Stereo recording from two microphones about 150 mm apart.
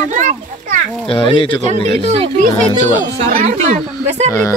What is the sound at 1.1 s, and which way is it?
Speech, 35° left (ahead or behind).